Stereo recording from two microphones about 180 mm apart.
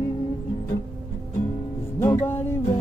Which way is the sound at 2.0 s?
15° left (ahead or behind).